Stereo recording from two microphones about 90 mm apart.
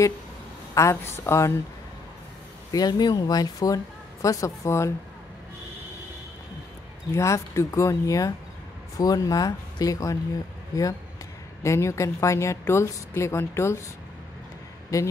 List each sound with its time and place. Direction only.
0.7 s a woman's voice: 30° left (ahead or behind)
2.7 s speech: 45° left (ahead or behind)
7.1 s a woman's voice: 30° left (ahead or behind)